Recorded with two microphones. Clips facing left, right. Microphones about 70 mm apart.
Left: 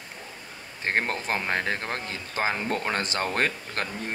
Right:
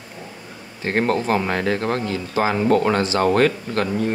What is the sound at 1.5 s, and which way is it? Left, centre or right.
Speech, left.